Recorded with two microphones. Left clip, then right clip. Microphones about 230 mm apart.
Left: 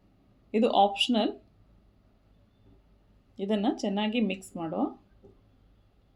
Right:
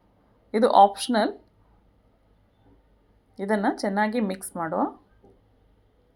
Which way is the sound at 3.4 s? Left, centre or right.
Centre.